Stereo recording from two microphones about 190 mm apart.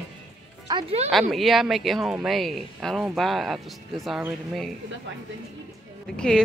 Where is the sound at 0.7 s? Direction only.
25° right (ahead or behind).